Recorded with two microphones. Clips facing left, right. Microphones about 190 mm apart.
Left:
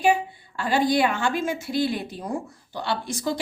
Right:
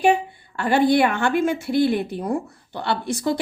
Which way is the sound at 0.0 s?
60° right (ahead or behind).